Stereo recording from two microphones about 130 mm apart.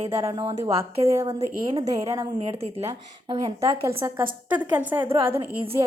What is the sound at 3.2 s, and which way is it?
Speech, 40° right (ahead or behind).